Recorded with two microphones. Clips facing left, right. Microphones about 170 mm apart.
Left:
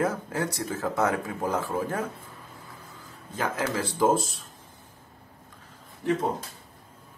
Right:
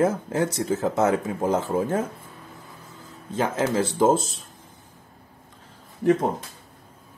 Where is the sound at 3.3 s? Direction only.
25° right (ahead or behind).